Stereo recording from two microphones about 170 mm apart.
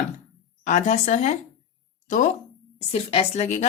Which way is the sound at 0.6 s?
45° left (ahead or behind).